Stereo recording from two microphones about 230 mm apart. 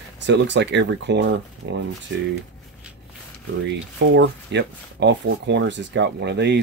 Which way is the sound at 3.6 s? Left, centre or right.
Right.